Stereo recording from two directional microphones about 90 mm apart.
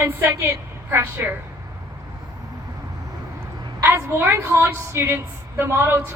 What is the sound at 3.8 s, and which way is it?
A woman's voice, 25° right (ahead or behind).